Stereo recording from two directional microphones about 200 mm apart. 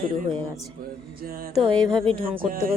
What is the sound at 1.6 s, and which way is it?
Speech, 25° right (ahead or behind).